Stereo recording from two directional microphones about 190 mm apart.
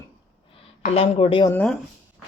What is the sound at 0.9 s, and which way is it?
Speech, 30° left (ahead or behind).